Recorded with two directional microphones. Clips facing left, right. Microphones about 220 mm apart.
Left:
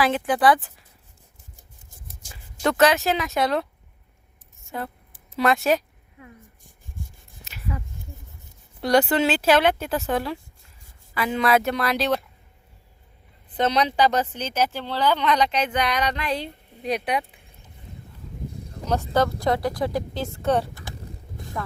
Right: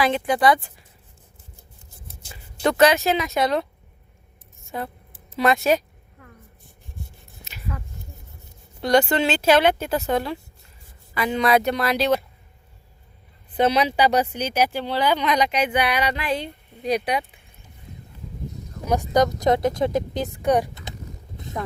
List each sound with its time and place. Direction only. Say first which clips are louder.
0.0 s speech: even; 5° left (ahead or behind)
2.3 s speech: right 2 dB; centre (ahead or behind)
5.4 s speech: right 1 dB; centre (ahead or behind)
7.7 s a sound: left 2 dB; 10° left (ahead or behind)
8.8 s speech: even; 5° left (ahead or behind)
13.6 s speech: right 2 dB; 10° right (ahead or behind)
18.9 s speech: right 2 dB; 15° right (ahead or behind)
21.3 s a sound: right 2 dB; 20° right (ahead or behind)